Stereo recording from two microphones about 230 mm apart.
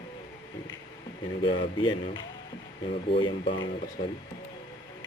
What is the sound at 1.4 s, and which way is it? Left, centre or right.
Speech, left.